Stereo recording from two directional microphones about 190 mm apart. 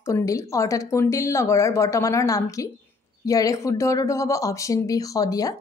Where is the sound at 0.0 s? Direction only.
15° left (ahead or behind).